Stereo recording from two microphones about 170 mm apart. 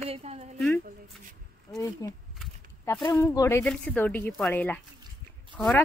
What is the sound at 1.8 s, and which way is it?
Speech, 20° left (ahead or behind).